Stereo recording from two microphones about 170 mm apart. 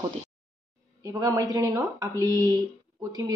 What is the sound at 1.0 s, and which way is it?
Speech, 20° right (ahead or behind).